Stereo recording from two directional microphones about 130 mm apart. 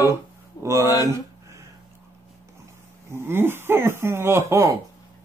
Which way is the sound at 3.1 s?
20° right (ahead or behind).